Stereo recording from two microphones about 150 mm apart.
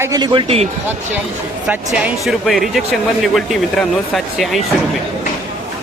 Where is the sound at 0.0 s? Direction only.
25° right (ahead or behind); by 0.7 s 40° right (ahead or behind).